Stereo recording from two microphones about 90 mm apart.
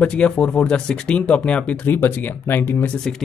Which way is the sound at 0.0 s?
10° left (ahead or behind).